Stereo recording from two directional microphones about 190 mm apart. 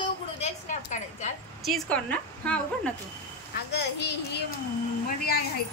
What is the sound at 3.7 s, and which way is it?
A woman's voice, 60° left (ahead or behind).